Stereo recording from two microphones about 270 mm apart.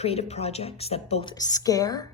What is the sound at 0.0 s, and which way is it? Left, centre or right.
Speech, left.